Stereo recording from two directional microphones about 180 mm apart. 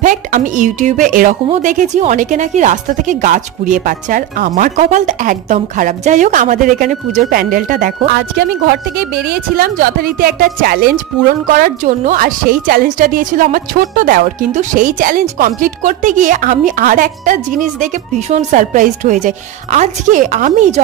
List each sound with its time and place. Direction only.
0.0 s a woman's voice: 45° right (ahead or behind)